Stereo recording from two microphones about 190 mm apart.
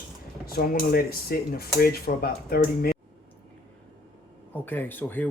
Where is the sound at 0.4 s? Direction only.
50° left (ahead or behind).